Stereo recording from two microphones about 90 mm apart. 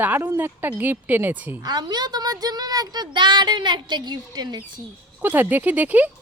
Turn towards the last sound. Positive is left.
turn(degrees=-20)  # may be behind; listen again after turning